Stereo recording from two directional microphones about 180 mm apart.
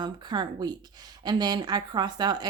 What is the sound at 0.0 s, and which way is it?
A woman's voice, 25° right (ahead or behind).